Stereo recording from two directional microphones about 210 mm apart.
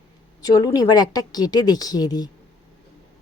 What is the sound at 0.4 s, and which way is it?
A woman's voice, 20° left (ahead or behind).